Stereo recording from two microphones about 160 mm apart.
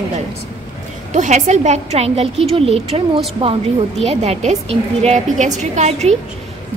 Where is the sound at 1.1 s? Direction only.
50° right (ahead or behind).